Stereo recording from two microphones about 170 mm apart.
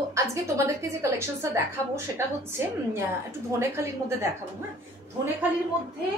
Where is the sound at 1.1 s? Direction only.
15° right (ahead or behind).